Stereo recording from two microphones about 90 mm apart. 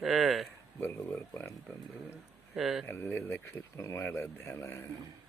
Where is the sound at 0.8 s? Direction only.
20° left (ahead or behind).